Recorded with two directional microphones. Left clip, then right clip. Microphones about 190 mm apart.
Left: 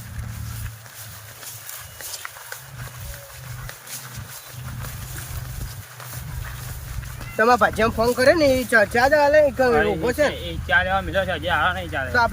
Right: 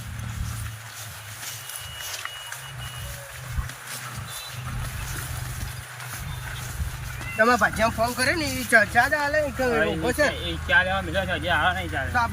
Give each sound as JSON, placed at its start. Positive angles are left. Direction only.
{"t": 7.3, "sound": "speech", "side_deg": 30}